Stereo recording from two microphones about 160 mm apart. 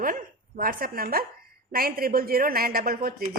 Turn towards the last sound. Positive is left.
turn(degrees=-65)  # may be behind; listen again after turning